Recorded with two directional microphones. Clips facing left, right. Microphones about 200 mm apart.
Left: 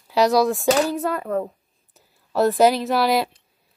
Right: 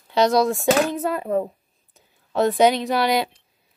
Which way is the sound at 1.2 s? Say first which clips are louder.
Right 2 dB; 25° right (ahead or behind).